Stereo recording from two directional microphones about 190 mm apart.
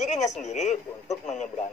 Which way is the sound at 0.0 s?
35° left (ahead or behind).